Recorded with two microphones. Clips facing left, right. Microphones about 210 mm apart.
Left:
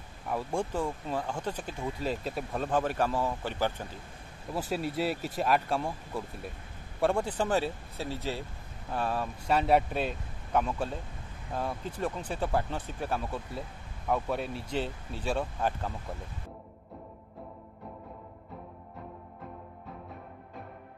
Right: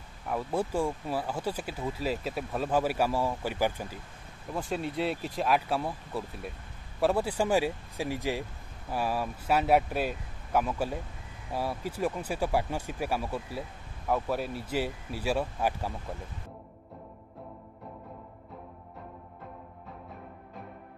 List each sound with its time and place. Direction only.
0.3 s speech: centre (ahead or behind)
4.6 s speech: 5° left (ahead or behind)